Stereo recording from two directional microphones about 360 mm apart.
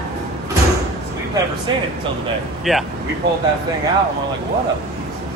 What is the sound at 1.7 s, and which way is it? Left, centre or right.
Speech, centre.